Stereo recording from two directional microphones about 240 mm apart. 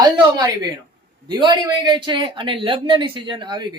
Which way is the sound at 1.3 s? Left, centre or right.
Centre.